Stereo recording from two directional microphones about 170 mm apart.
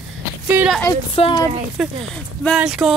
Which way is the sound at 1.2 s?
30° left (ahead or behind).